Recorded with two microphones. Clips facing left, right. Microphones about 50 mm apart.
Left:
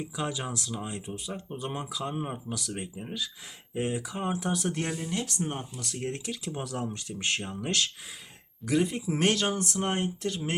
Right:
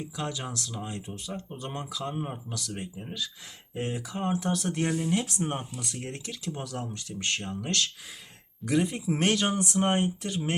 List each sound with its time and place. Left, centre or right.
0.0 s speech: centre
5.0 s speech: centre
5.8 s speech: centre
8.6 s speech: centre